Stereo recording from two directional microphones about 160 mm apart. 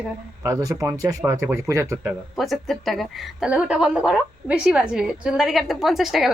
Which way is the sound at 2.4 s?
Centre (ahead or behind).